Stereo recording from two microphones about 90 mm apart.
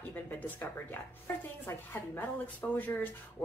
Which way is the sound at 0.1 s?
20° left (ahead or behind).